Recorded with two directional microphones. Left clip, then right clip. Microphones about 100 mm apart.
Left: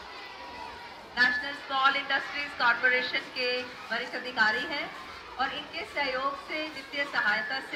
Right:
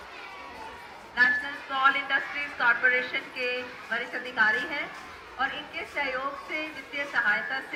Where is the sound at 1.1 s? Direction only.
20° left (ahead or behind).